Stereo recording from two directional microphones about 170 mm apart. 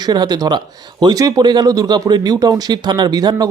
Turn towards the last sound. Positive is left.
turn(degrees=-25)  # may be behind; listen again after turning